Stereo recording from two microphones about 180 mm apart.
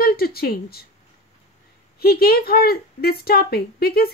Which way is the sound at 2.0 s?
60° left (ahead or behind).